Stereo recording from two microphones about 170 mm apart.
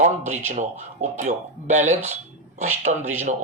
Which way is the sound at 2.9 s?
45° right (ahead or behind).